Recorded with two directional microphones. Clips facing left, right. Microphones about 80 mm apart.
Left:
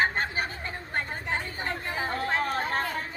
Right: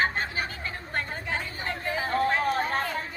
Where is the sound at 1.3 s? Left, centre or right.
Left.